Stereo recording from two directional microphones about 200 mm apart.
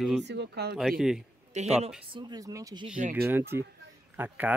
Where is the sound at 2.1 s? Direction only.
20° right (ahead or behind).